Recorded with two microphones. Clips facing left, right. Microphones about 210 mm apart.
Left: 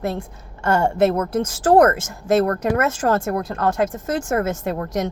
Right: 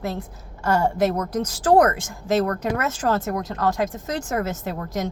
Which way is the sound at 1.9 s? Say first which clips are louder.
Left 4 dB; 45° left (ahead or behind).